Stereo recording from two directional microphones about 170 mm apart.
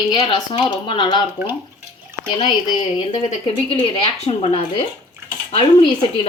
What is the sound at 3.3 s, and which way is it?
Speech, 35° left (ahead or behind).